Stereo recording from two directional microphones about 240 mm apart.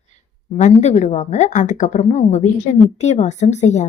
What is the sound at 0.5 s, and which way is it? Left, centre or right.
A woman's voice, left.